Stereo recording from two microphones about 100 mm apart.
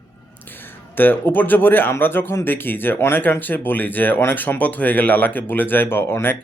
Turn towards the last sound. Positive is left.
turn(degrees=25)  # may be behind; listen again after turning